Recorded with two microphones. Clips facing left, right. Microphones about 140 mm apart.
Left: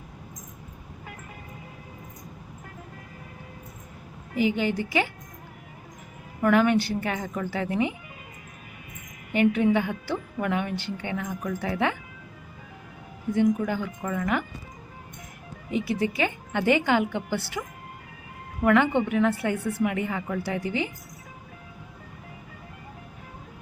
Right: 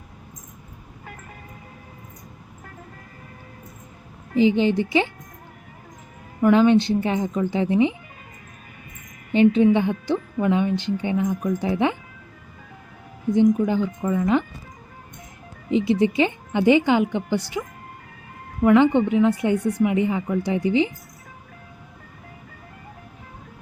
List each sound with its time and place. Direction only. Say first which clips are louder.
4.4 s a woman's voice: right 7 dB; 20° right (ahead or behind)
6.4 s a woman's voice: right 5 dB; 20° right (ahead or behind)
9.3 s a woman's voice: right 5 dB; 25° right (ahead or behind)
13.3 s a woman's voice: right 5 dB; 20° right (ahead or behind)
15.7 s a woman's voice: right 7 dB; 20° right (ahead or behind)
18.6 s a woman's voice: right 5 dB; 20° right (ahead or behind)